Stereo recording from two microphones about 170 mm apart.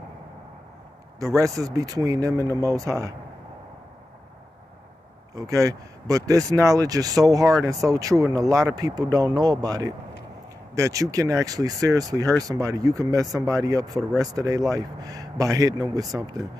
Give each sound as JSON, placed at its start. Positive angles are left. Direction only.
{"t": 1.2, "sound": "speech", "side_deg": -20}
{"t": 5.3, "sound": "speech", "side_deg": -20}